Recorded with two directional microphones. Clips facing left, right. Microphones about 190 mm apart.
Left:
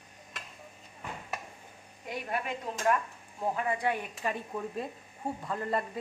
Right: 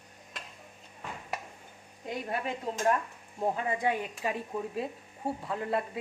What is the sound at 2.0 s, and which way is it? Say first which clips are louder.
A woman's voice: right 1 dB; 30° right (ahead or behind).